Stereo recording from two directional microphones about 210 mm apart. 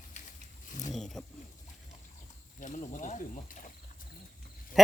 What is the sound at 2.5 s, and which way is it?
Cricket, 40° left (ahead or behind).